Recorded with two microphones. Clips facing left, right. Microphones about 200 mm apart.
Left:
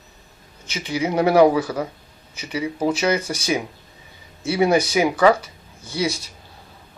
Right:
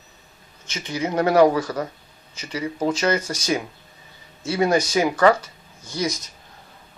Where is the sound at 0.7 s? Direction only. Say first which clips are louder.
Left 2 dB; 10° left (ahead or behind).